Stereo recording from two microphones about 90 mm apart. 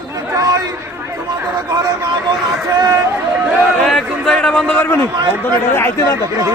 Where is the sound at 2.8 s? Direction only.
45° right (ahead or behind).